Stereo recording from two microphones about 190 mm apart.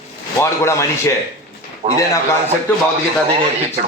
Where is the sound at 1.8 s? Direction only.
40° right (ahead or behind).